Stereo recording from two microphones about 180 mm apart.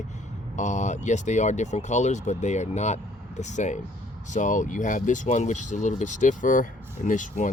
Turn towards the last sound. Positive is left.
turn(degrees=45)  # may be behind; listen again after turning